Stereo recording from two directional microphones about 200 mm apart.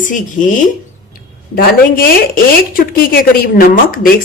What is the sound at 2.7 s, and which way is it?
Speech, 45° left (ahead or behind).